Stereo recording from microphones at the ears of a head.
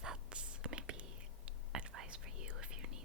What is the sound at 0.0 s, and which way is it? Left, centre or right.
Whispering, right.